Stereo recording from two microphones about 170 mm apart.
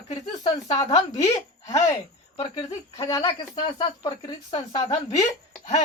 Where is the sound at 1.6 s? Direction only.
20° left (ahead or behind).